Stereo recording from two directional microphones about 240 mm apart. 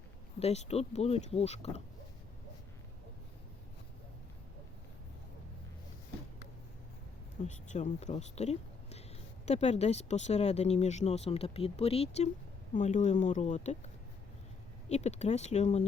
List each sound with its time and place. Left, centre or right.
0.3 s speech: left
7.4 s speech: left